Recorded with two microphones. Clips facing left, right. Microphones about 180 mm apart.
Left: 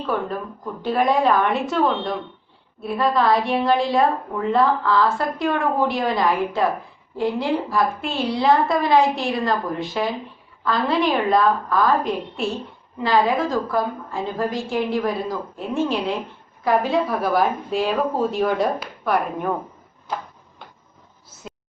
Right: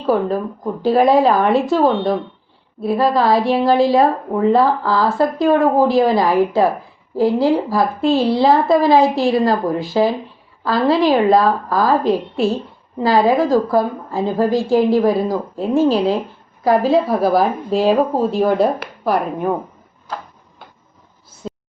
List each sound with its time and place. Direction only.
0.0 s speech: 35° right (ahead or behind)